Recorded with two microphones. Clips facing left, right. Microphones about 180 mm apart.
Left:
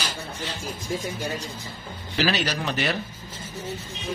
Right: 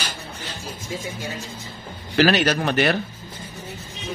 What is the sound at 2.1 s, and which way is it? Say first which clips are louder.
Speech: right 7 dB; 60° right (ahead or behind).